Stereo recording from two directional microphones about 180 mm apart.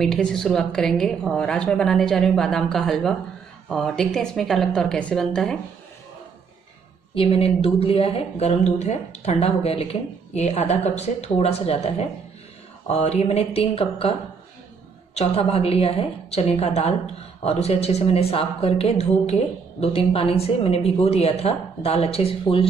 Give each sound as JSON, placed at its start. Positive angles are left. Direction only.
{"t": 0.0, "sound": "a woman's voice", "side_deg": 0}
{"t": 7.2, "sound": "a woman's voice", "side_deg": 30}
{"t": 15.1, "sound": "a woman's voice", "side_deg": 35}